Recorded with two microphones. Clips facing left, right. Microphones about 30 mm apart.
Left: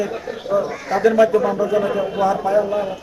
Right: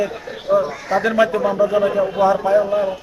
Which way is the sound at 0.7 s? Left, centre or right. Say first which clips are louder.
Right 2 dB; centre.